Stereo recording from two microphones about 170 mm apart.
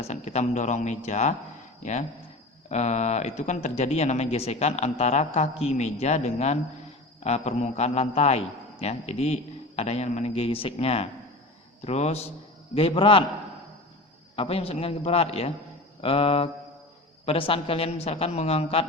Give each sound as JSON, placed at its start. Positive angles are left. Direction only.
{"t": 0.0, "sound": "a man's voice", "side_deg": 40}
{"t": 14.3, "sound": "speech", "side_deg": 35}